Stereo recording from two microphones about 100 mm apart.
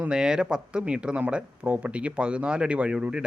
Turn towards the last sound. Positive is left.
turn(degrees=-10)  # may be behind; listen again after turning